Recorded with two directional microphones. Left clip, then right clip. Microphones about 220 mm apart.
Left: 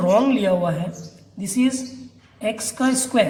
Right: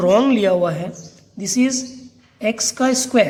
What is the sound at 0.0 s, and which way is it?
A man's voice, 45° right (ahead or behind).